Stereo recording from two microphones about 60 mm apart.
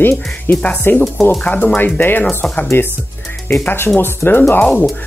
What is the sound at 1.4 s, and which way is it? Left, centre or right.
Speech, left.